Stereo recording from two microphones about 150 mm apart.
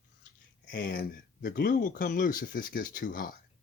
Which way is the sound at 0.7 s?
80° left.